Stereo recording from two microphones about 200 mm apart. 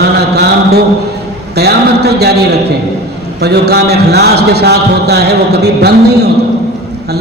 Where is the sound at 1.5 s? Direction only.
55° right (ahead or behind).